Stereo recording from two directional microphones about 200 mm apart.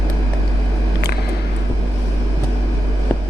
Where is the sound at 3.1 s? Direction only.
10° left (ahead or behind).